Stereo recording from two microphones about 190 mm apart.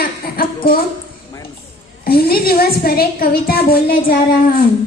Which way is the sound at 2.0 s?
50° left (ahead or behind).